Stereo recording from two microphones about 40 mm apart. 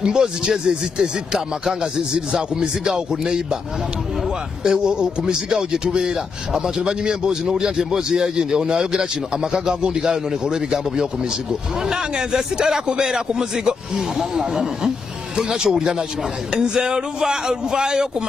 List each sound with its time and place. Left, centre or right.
0.0 s speech: centre
4.6 s speech: right